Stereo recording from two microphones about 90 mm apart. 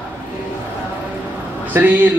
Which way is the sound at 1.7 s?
20° right (ahead or behind).